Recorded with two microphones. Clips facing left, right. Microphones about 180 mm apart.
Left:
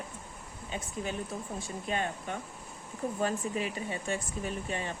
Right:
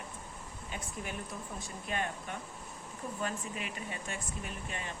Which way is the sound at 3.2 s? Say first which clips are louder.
Left 7 dB; 35° left (ahead or behind).